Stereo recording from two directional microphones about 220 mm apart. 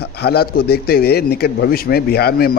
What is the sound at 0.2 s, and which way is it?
Speech, 45° left (ahead or behind).